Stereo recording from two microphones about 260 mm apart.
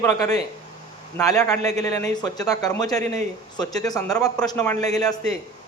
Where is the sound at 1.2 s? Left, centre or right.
Centre.